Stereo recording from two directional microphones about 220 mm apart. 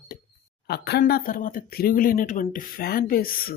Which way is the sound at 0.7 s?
50° left (ahead or behind).